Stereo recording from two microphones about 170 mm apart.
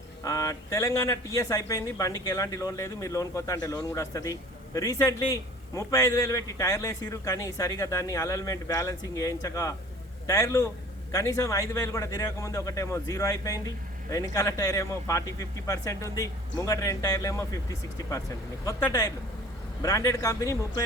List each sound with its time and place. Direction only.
0.2 s speech: 20° left (ahead or behind)
18.6 s speech: 20° left (ahead or behind)